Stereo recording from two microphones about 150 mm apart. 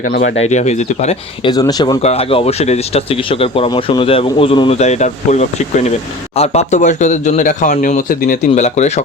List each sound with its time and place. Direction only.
0.0 s speech: 90° left
0.3 s speech: 50° left (ahead or behind)
1.5 s speech: 25° left (ahead or behind)
2.0 s speech: 45° left (ahead or behind)
4.8 s speech: 50° left (ahead or behind)